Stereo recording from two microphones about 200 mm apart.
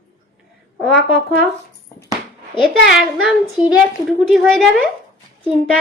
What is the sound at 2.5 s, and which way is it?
Speech, 25° left (ahead or behind).